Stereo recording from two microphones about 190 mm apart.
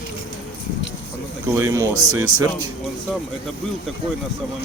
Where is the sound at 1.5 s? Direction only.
15° right (ahead or behind).